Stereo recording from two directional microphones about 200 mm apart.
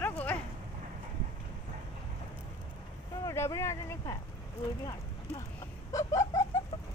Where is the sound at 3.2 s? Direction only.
15° left (ahead or behind).